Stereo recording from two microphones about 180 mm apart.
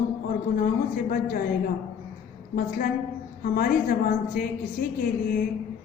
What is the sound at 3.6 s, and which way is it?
A woman's voice, 50° left (ahead or behind).